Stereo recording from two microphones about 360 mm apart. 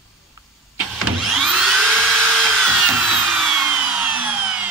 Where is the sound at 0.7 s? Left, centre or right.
Centre.